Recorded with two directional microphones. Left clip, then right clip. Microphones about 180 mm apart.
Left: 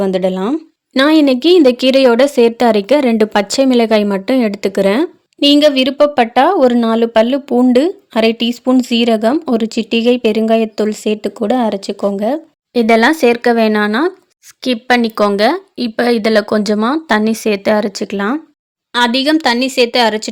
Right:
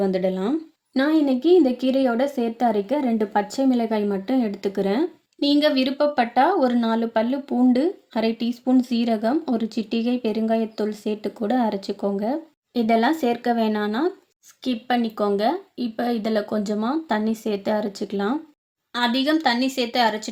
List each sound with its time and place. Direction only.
0.0 s speech: 45° left (ahead or behind)
0.9 s speech: 65° left (ahead or behind); by 12.4 s 35° left (ahead or behind)
12.7 s speech: 55° left (ahead or behind)
18.9 s speech: 60° left (ahead or behind)